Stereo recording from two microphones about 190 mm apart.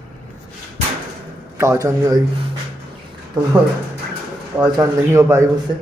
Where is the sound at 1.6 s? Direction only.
15° right (ahead or behind).